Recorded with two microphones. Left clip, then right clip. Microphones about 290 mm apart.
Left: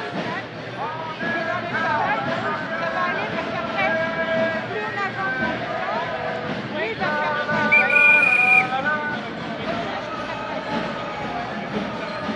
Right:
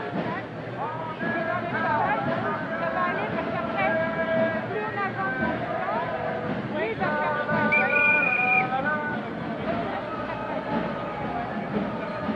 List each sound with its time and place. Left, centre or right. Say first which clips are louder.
3.9 s vehicle: left 3 dB; centre
7.7 s whistle: left 7 dB; centre